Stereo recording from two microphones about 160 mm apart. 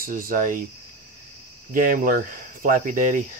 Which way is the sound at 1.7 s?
60° right (ahead or behind).